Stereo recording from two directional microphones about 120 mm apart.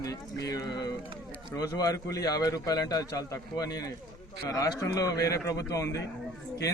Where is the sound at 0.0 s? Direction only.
30° left (ahead or behind).